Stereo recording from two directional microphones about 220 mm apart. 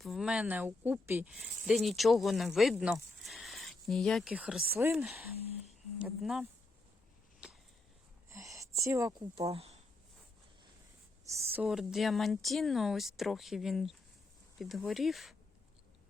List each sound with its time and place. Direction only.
0.0 s speech: centre (ahead or behind)
8.3 s a sound: 15° right (ahead or behind)
9.3 s speech: 25° right (ahead or behind)
11.3 s speech: 15° right (ahead or behind)
11.6 s speech: centre (ahead or behind)